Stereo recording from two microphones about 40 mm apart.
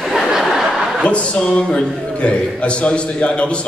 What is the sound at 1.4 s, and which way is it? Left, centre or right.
A man's voice, left.